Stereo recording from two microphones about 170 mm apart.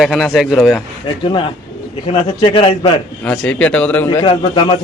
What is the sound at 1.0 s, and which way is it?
A man's voice, 30° left (ahead or behind).